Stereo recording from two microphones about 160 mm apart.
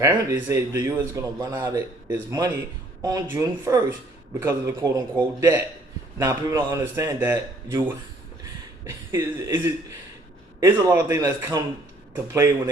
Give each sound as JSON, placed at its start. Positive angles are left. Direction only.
{"t": 0.0, "sound": "a man's voice", "side_deg": -15}
{"t": 9.1, "sound": "speech", "side_deg": -15}
{"t": 10.8, "sound": "speech", "side_deg": -20}